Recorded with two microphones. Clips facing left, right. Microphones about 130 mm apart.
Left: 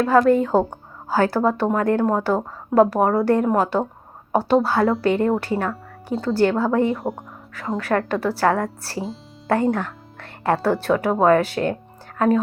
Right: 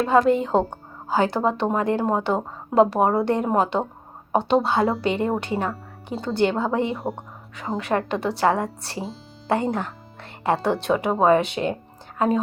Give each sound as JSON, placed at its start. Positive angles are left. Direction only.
{"t": 0.0, "sound": "speech", "side_deg": -20}